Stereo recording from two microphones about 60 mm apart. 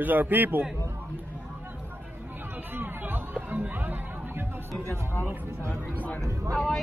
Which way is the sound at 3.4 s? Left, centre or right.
Right.